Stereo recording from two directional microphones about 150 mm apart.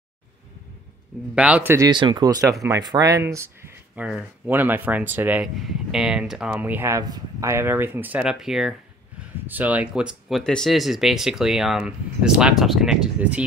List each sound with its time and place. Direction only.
1.3 s speech: 5° right (ahead or behind)
1.9 s speech: 30° right (ahead or behind); by 13.5 s 10° right (ahead or behind)